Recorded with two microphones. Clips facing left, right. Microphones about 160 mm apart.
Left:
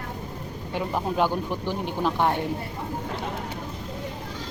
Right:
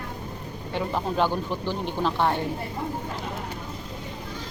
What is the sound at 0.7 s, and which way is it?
Speech, 10° left (ahead or behind).